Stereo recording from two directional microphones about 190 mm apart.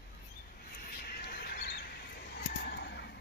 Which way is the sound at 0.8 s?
55° left (ahead or behind).